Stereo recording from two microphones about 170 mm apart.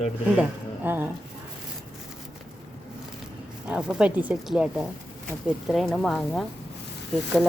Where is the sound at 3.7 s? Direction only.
5° right (ahead or behind).